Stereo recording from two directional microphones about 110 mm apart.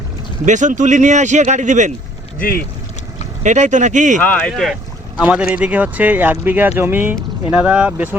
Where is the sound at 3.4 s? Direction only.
90° right.